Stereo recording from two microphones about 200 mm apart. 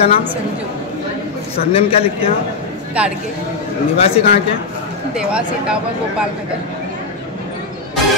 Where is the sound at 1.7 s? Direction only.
30° left (ahead or behind).